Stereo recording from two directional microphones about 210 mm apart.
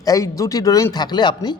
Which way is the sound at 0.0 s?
15° left (ahead or behind).